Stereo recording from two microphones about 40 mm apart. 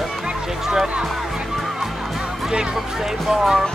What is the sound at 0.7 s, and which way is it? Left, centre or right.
Music, right.